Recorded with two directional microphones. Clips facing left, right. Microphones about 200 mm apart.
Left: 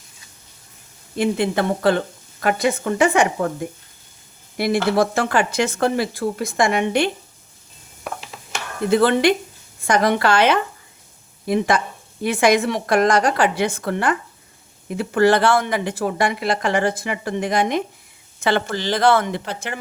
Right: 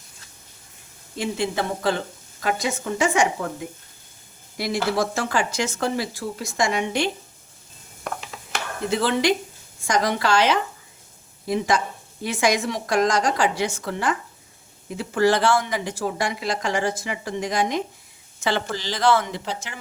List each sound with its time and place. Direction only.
1.1 s speech: 60° left (ahead or behind)
8.1 s ratchet: 5° left (ahead or behind)
8.9 s speech: 55° left (ahead or behind)